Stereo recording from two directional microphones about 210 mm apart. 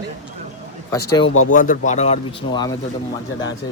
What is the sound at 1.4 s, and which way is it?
Speech, 40° left (ahead or behind).